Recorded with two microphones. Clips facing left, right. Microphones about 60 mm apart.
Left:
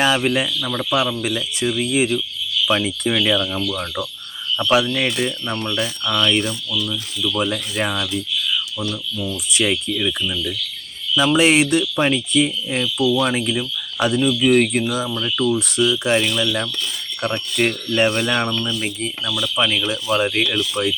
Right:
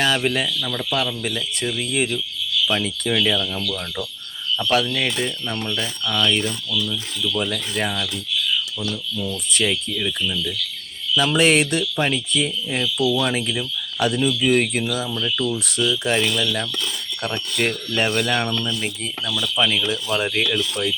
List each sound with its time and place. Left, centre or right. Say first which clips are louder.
0.0 s speech: left 3 dB; centre
9.1 s speech: left 2 dB; centre
11.1 s speech: left 2 dB; centre
15.5 s speech: left 4 dB; centre